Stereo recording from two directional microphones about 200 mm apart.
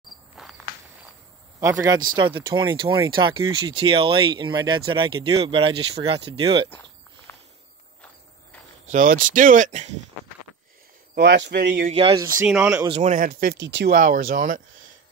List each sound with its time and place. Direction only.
0.4 s insect: centre (ahead or behind)
1.6 s speech: 15° right (ahead or behind)
7.3 s a sound: 10° left (ahead or behind)
8.9 s speech: 45° right (ahead or behind)
11.1 s speech: 55° right (ahead or behind)
11.6 s speech: 45° right (ahead or behind)
11.9 s speech: 25° right (ahead or behind)
12.4 s speech: 5° right (ahead or behind)
12.8 s speech: 35° right (ahead or behind); by 13.9 s 60° right (ahead or behind)
13.9 s speech: 40° right (ahead or behind)